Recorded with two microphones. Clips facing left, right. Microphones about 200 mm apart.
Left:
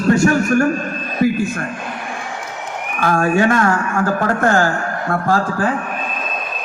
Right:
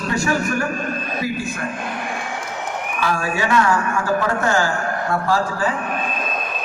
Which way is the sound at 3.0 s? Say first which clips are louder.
Left 8 dB; 50° left (ahead or behind).